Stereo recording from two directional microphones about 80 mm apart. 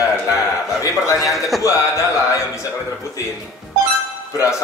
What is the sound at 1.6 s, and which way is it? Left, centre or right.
A man's voice, left.